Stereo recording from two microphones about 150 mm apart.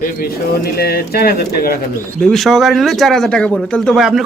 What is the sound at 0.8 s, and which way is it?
Speech, 90° left.